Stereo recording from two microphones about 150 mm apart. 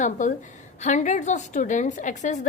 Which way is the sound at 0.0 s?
55° left (ahead or behind).